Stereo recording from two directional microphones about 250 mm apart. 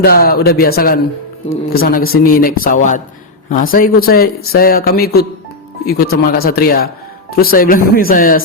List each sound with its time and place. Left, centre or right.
0.0 s speech: left